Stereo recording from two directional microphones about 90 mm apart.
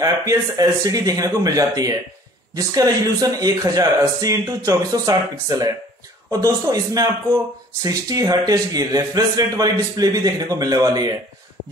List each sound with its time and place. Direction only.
0.0 s speech: 40° right (ahead or behind)